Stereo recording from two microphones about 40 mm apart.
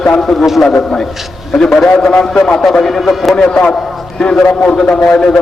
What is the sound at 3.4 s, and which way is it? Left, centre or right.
A man's voice, centre.